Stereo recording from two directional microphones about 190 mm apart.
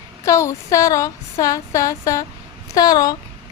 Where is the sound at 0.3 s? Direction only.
15° left (ahead or behind).